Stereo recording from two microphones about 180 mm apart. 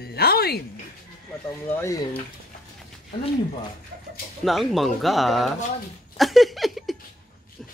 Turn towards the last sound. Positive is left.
turn(degrees=0)  # may be behind; listen again after turning